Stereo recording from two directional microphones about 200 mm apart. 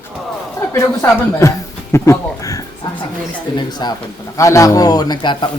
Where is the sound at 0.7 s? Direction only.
15° left (ahead or behind).